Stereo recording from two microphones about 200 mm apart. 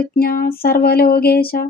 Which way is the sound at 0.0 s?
50° left (ahead or behind).